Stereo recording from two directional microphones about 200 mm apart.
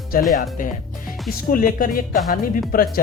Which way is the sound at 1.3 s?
45° left (ahead or behind).